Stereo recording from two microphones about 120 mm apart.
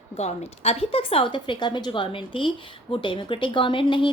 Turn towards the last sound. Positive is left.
turn(degrees=45)  # may be behind; listen again after turning